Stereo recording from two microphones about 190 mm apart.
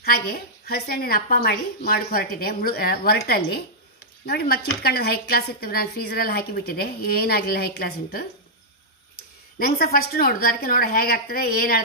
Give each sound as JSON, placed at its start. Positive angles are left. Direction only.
{"t": 0.0, "sound": "a woman's voice", "side_deg": 50}
{"t": 9.6, "sound": "a woman's voice", "side_deg": 50}